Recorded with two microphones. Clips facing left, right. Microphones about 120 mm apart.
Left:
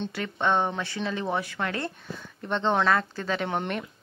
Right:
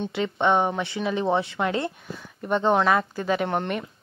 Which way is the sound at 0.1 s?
20° right (ahead or behind).